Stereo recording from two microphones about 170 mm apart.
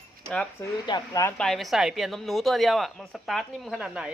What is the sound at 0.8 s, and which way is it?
Speech, 25° left (ahead or behind).